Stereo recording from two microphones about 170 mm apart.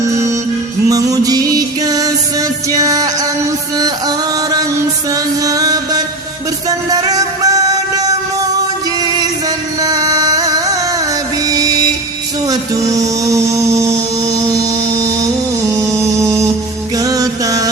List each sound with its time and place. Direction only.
0.0 s music: 15° right (ahead or behind)
5.1 s music: 20° right (ahead or behind)
9.8 s music: 20° right (ahead or behind)
12.5 s a sound: 20° right (ahead or behind)
14.3 s music: 20° right (ahead or behind)